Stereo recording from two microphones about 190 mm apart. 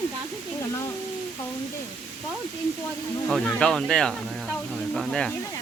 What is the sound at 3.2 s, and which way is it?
Speech, centre (ahead or behind).